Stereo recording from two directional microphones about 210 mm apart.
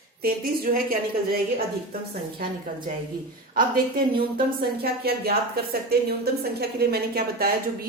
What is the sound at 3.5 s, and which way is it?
A woman's voice, 45° right (ahead or behind).